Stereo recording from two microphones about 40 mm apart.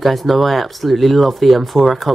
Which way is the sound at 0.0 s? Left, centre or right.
Centre.